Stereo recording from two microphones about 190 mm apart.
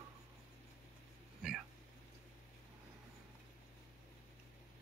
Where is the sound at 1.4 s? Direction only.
5° right (ahead or behind).